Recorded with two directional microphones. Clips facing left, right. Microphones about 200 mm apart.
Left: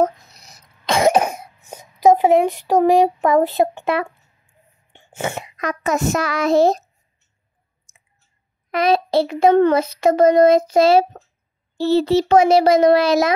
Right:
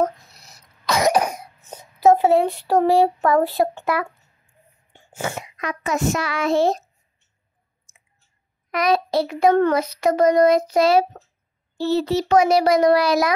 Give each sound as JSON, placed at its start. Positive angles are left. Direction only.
{"t": 0.0, "sound": "cough", "side_deg": 20}
{"t": 1.6, "sound": "speech", "side_deg": 10}
{"t": 4.9, "sound": "cough", "side_deg": 25}
{"t": 5.6, "sound": "a child's voice", "side_deg": 45}
{"t": 8.7, "sound": "child singing", "side_deg": 25}